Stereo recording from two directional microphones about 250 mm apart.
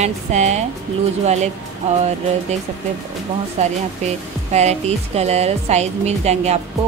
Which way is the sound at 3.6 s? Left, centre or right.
Right.